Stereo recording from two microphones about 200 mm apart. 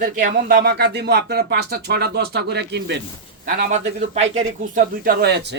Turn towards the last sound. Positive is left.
turn(degrees=-55)  # may be behind; listen again after turning